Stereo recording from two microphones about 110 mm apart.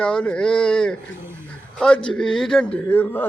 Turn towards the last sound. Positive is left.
turn(degrees=15)  # may be behind; listen again after turning